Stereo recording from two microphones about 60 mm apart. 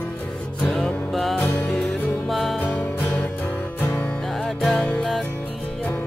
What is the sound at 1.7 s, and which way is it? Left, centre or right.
Music, centre.